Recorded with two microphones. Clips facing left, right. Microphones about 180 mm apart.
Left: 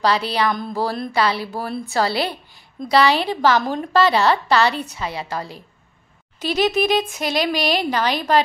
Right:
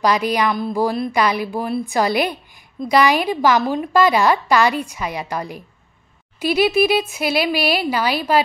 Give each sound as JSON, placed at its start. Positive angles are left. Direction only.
{"t": 0.0, "sound": "a woman's voice", "side_deg": -15}